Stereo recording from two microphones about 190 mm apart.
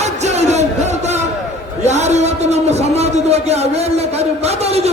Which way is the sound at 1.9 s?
35° right (ahead or behind).